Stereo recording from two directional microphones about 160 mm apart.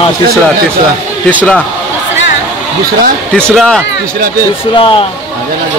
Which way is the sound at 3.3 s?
5° left (ahead or behind).